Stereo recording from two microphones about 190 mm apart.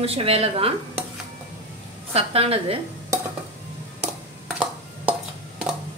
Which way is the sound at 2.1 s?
30° right (ahead or behind).